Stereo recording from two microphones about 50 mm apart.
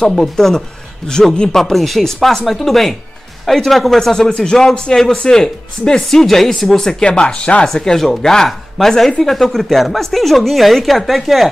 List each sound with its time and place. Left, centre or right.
0.0 s speech: centre
1.5 s a woman's voice: centre